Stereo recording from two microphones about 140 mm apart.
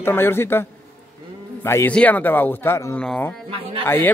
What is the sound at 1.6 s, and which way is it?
Speech, 15° left (ahead or behind).